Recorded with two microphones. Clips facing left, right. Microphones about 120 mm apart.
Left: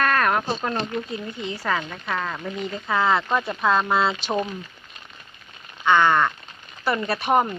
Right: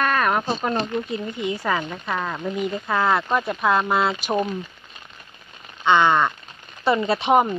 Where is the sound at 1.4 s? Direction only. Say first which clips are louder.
Right 2 dB; 15° right (ahead or behind).